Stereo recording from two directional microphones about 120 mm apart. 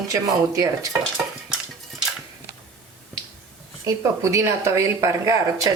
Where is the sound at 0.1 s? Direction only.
30° right (ahead or behind).